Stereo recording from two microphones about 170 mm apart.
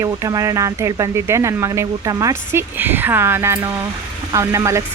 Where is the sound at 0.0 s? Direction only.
20° right (ahead or behind).